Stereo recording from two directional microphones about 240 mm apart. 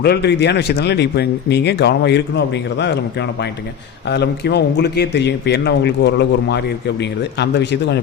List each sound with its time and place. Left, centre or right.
0.0 s a man's voice: left